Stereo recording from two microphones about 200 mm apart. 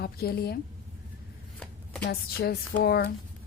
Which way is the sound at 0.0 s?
50° left (ahead or behind).